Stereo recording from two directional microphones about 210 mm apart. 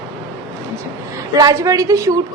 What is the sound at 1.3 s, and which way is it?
Speech, 15° right (ahead or behind).